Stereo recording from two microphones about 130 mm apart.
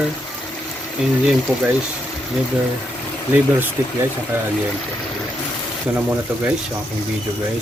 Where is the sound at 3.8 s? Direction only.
15° right (ahead or behind).